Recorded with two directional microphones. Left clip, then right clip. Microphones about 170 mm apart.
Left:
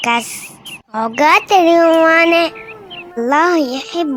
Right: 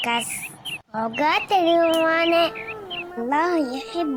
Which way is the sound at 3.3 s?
20° left (ahead or behind).